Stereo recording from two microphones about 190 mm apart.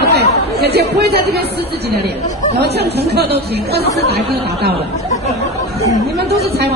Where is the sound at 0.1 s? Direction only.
60° right (ahead or behind).